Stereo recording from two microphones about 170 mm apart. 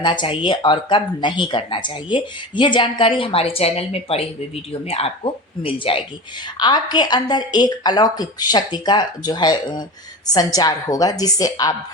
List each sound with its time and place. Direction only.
0.0 s speech: 30° left (ahead or behind)